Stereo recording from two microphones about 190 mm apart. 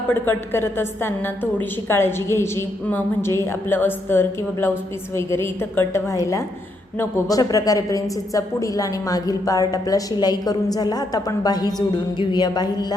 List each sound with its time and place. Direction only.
0.1 s a woman's voice: 10° left (ahead or behind)